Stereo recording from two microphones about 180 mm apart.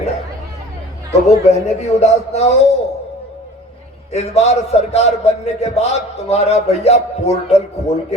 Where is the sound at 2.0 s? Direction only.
35° left (ahead or behind).